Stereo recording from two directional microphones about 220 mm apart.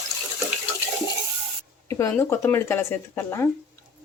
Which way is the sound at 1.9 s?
10° left (ahead or behind).